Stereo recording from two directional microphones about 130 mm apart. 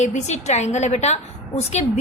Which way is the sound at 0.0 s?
65° left (ahead or behind).